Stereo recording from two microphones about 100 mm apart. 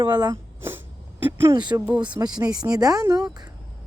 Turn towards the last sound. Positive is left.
turn(degrees=-40)  # may be behind; listen again after turning